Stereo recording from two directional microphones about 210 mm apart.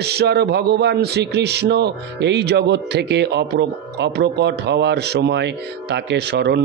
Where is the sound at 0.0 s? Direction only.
50° right (ahead or behind).